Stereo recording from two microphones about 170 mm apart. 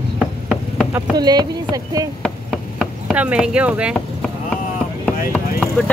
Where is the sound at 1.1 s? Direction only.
25° right (ahead or behind).